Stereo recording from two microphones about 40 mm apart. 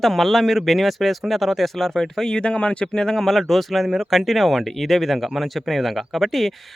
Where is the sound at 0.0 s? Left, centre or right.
Centre.